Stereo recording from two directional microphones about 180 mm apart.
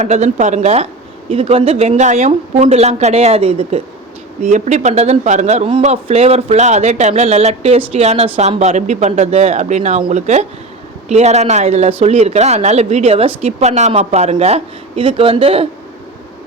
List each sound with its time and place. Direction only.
0.0 s a man's voice: 40° right (ahead or behind)